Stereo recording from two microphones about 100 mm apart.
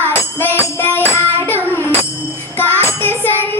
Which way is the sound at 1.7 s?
20° left (ahead or behind).